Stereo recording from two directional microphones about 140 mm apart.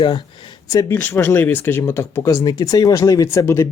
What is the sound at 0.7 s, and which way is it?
Speech, 20° left (ahead or behind).